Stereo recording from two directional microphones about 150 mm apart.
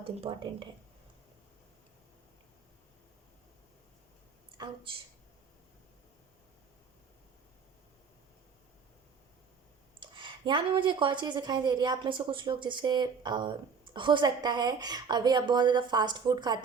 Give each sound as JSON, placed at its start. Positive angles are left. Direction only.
{"t": 0.0, "sound": "speech", "side_deg": -35}
{"t": 4.5, "sound": "a woman's voice", "side_deg": -30}
{"t": 10.0, "sound": "a woman's voice", "side_deg": -30}